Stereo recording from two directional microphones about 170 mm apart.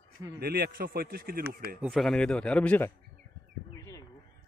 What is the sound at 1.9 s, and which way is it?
A man's voice, centre (ahead or behind).